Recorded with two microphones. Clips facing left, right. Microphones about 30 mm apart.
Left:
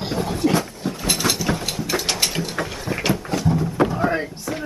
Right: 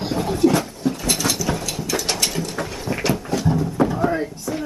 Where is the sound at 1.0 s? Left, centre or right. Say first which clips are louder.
Left 4 dB; left.